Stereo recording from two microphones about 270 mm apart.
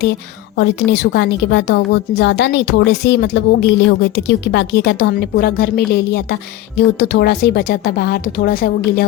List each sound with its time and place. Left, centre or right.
0.0 s a woman's voice: left